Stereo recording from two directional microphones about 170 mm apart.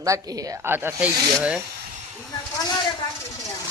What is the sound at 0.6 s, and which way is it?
Speech, 10° right (ahead or behind).